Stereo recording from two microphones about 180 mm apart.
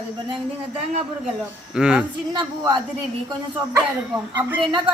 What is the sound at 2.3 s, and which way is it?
Speech, 25° right (ahead or behind).